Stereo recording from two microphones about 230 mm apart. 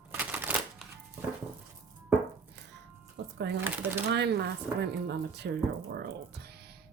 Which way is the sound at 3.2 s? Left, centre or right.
Right.